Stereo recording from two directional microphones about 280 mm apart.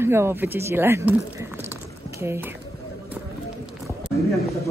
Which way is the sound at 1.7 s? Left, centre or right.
Centre.